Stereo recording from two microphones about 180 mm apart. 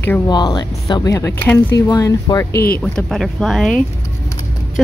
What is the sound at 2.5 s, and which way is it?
Speech, 60° left (ahead or behind).